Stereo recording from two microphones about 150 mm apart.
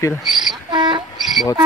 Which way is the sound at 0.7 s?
30° right (ahead or behind).